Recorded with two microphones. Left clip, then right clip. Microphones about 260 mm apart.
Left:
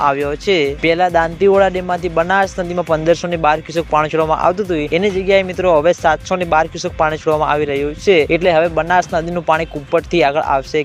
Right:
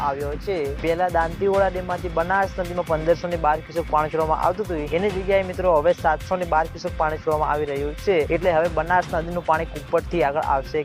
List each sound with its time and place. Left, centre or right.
0.0 s speech: left